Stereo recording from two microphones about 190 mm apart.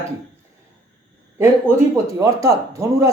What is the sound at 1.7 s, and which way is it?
Speech, 15° right (ahead or behind).